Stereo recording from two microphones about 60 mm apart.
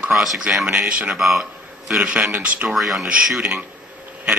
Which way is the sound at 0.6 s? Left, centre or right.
Centre.